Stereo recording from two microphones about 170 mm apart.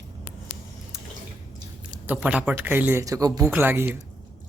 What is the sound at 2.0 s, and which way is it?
Speech, 5° right (ahead or behind).